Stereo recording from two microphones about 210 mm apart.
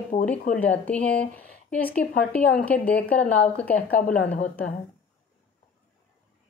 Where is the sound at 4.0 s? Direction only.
40° left (ahead or behind).